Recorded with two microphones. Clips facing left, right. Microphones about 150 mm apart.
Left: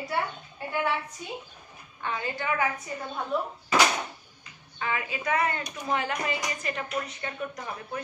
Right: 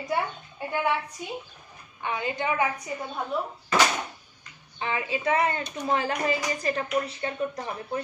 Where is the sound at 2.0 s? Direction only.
15° right (ahead or behind).